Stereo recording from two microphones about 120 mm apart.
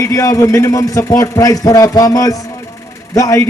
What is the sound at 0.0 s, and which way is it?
A man's voice, 30° left (ahead or behind).